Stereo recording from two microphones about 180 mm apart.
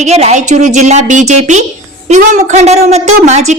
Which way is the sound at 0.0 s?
40° right (ahead or behind).